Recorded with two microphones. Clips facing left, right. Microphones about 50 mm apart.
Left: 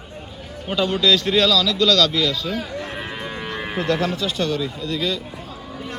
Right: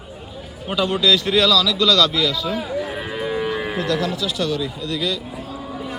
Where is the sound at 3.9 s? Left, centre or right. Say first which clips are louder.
Left 3 dB; left.